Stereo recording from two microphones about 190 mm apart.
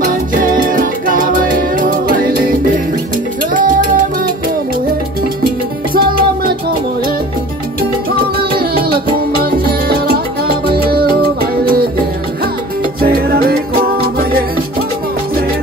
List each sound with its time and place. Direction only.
0.0 s music: 45° right (ahead or behind)
5.9 s music: 50° right (ahead or behind)
8.5 s music: 50° right (ahead or behind)
13.0 s music: 50° right (ahead or behind)